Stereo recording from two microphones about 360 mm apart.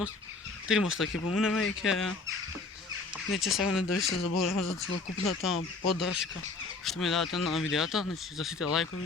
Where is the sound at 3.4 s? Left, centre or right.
Centre.